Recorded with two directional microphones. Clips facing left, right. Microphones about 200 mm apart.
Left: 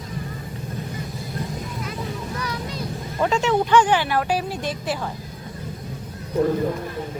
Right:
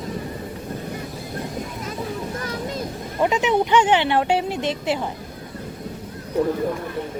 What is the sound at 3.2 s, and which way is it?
Speech, 15° right (ahead or behind).